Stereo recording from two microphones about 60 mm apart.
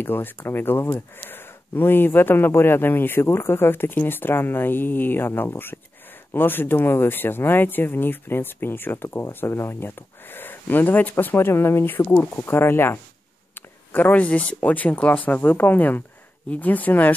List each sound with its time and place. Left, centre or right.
0.0 s speech: left
12.1 s speech: left
12.4 s speech: left
13.6 s speech: left